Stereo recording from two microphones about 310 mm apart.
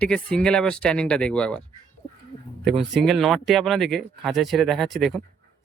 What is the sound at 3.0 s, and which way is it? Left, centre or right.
Speech, centre.